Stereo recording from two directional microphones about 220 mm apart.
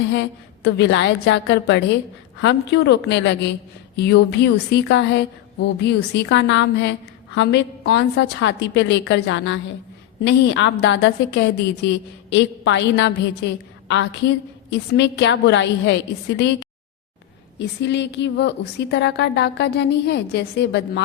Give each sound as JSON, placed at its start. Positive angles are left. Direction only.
{"t": 0.1, "sound": "a woman's voice", "side_deg": 50}
{"t": 17.6, "sound": "a woman's voice", "side_deg": 50}